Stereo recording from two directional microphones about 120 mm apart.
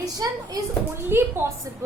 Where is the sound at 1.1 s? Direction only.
20° right (ahead or behind).